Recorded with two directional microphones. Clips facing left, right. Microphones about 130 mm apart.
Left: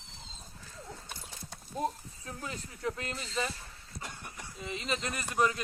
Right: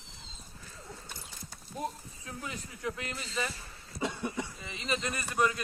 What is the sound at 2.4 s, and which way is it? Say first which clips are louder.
A man's voice: left 1 dB; centre (ahead or behind).